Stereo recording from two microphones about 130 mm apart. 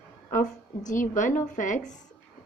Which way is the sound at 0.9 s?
80° left.